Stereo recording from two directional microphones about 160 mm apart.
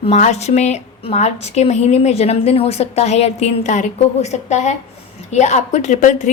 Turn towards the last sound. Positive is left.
turn(degrees=50)  # may be behind; listen again after turning